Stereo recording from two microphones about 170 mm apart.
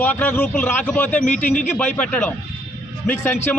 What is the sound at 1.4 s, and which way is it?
Speech, 45° left (ahead or behind).